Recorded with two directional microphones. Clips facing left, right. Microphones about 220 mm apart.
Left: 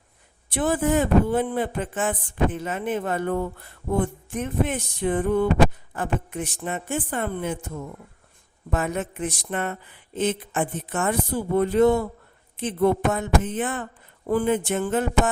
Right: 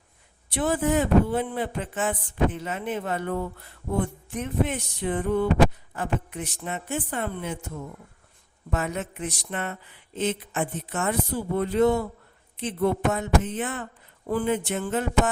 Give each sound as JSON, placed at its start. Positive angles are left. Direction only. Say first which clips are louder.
{"t": 0.5, "sound": "speech", "louder": "left 2 dB", "side_deg": 50}
{"t": 4.4, "sound": "speech", "louder": "left 1 dB", "side_deg": 50}
{"t": 8.7, "sound": "speech", "louder": "left 3 dB", "side_deg": 50}